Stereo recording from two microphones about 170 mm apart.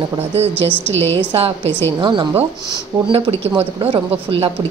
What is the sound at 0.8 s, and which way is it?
A woman's voice, 35° right (ahead or behind).